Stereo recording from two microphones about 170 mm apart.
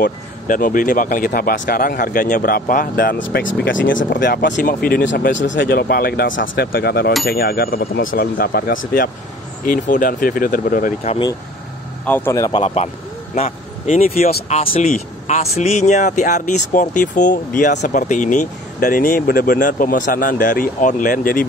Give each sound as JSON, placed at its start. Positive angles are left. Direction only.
{"t": 0.5, "sound": "speech", "side_deg": 55}
{"t": 12.1, "sound": "speech", "side_deg": 15}
{"t": 12.5, "sound": "speech", "side_deg": 40}